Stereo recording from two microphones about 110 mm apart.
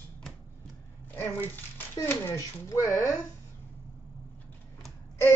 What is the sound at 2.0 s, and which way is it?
A child's voice, 25° left (ahead or behind).